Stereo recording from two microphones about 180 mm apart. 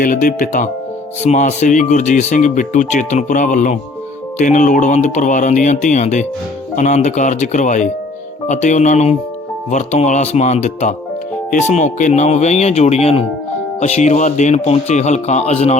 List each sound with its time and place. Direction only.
0.0 s speech: 50° left (ahead or behind)